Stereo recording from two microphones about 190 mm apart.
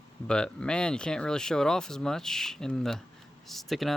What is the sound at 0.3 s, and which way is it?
Speech, 5° left (ahead or behind).